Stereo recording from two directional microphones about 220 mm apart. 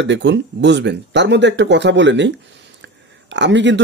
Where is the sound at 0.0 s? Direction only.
55° right (ahead or behind).